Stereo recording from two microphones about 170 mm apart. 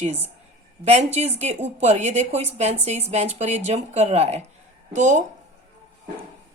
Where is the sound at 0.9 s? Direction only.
40° right (ahead or behind).